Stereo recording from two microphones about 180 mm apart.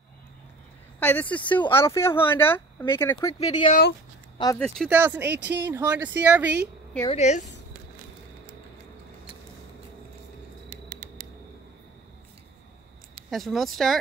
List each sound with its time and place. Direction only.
0.9 s speech: 10° left (ahead or behind)
3.3 s speech: 30° left (ahead or behind)
4.6 s speech: 5° left (ahead or behind)
4.8 s speech: 10° right (ahead or behind)
7.1 s speech: 40° left (ahead or behind)
13.3 s speech: centre (ahead or behind)